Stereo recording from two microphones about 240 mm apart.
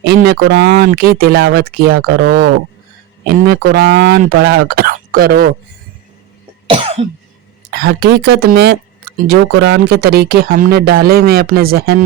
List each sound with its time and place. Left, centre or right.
0.0 s speech: right
6.7 s cough: right
7.7 s speech: right